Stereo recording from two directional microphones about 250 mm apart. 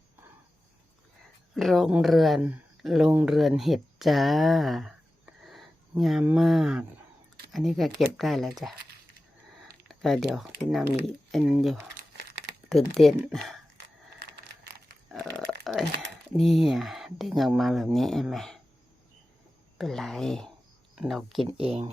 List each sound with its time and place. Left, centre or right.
1.5 s speech: centre
9.9 s speech: centre
15.1 s burping: centre
16.4 s speech: centre
19.8 s speech: centre
21.4 s speech: right